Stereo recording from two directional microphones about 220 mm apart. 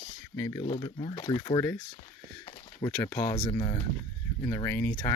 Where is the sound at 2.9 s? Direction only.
10° left (ahead or behind).